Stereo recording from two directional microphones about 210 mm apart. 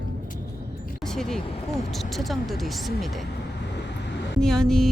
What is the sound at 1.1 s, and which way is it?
Speech, centre (ahead or behind).